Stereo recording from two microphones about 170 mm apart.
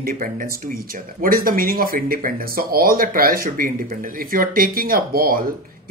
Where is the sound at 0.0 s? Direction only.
55° right (ahead or behind).